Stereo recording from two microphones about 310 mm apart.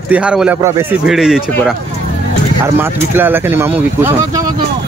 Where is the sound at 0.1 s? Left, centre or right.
Centre.